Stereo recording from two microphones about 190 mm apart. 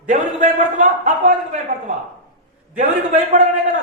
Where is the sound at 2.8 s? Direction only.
40° right (ahead or behind).